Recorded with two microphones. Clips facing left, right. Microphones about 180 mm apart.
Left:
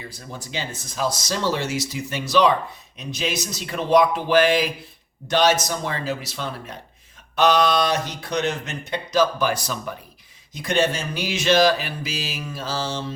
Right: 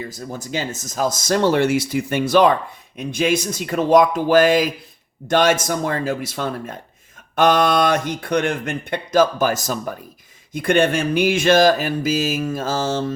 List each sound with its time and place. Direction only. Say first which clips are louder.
0.1 s speech: right 6 dB; 45° right (ahead or behind)